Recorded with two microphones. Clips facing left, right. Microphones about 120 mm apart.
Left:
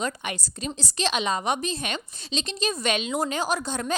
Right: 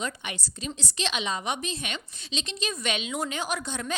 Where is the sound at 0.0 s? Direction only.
45° left (ahead or behind).